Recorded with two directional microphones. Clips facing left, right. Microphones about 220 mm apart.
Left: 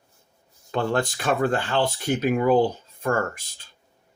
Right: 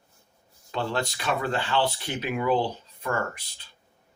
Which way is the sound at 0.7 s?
50° left (ahead or behind).